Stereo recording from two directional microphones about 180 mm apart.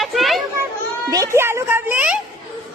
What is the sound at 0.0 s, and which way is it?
Children playing, centre (ahead or behind).